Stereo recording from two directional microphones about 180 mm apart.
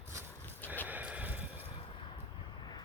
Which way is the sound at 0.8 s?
10° right (ahead or behind).